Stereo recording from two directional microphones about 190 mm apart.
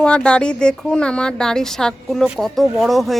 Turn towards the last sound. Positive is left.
turn(degrees=0)  # may be behind; listen again after turning